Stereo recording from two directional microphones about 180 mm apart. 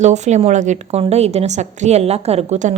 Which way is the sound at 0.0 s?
40° right (ahead or behind).